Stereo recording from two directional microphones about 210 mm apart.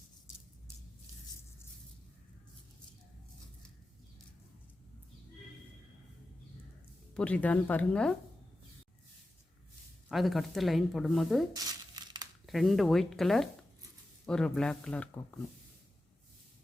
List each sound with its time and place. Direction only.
7.1 s speech: 5° left (ahead or behind)
10.1 s speech: centre (ahead or behind)
11.5 s crumpling: 20° right (ahead or behind)
12.5 s speech: centre (ahead or behind)